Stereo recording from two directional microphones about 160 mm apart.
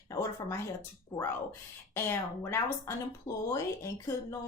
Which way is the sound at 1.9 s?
15° left (ahead or behind).